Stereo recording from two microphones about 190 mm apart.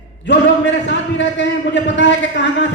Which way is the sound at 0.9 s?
70° left (ahead or behind).